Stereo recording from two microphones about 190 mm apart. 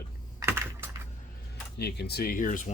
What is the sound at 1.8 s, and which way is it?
Speech, 60° left (ahead or behind).